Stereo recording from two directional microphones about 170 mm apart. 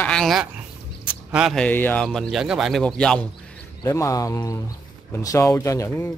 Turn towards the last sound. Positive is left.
turn(degrees=15)  # may be behind; listen again after turning